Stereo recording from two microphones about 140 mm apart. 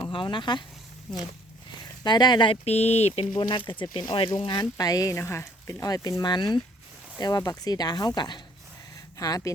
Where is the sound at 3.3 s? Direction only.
35° left (ahead or behind).